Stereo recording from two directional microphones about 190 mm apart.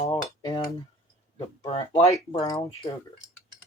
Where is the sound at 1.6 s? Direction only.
30° left (ahead or behind).